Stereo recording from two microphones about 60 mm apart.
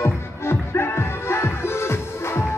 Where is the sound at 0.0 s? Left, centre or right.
Left.